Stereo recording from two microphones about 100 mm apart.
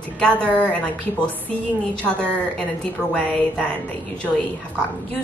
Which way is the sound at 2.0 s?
10° left (ahead or behind).